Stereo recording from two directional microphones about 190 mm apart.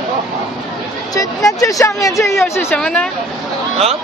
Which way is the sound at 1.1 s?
20° left (ahead or behind).